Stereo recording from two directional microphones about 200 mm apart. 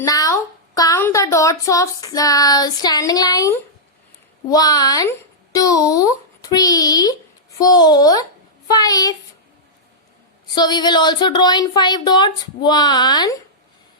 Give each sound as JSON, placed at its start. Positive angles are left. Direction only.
{"t": 0.0, "sound": "a child's voice", "side_deg": 15}
{"t": 10.5, "sound": "speech", "side_deg": 20}